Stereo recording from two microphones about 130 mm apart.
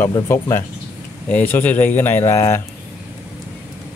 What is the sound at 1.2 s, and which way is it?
Speech, 15° left (ahead or behind).